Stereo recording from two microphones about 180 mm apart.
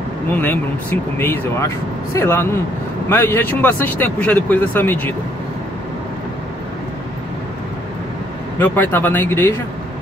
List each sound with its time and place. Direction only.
0.3 s speech: 10° left (ahead or behind)
8.5 s speech: 10° left (ahead or behind)